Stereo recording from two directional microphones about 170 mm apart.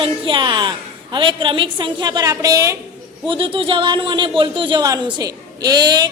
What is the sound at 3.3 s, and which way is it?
A woman's voice, 30° right (ahead or behind).